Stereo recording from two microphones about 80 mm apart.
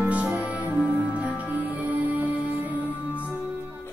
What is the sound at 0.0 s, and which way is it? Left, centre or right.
Music, centre.